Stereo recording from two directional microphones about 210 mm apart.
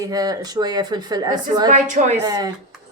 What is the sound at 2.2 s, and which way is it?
Speech, 20° right (ahead or behind).